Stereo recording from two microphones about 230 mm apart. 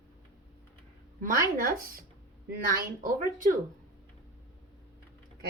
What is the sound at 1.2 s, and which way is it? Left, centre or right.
Speech, right.